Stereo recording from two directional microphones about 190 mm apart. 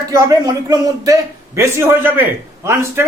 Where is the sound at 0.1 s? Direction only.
20° right (ahead or behind).